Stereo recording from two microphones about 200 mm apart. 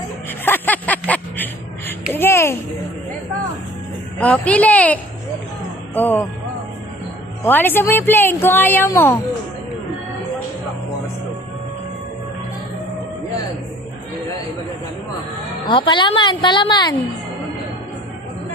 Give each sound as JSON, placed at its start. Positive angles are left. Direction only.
{"t": 0.3, "sound": "a sound", "side_deg": 10}
{"t": 2.1, "sound": "speech", "side_deg": 10}
{"t": 4.2, "sound": "speech", "side_deg": 5}
{"t": 7.4, "sound": "speech", "side_deg": 10}
{"t": 15.6, "sound": "a woman's voice", "side_deg": 25}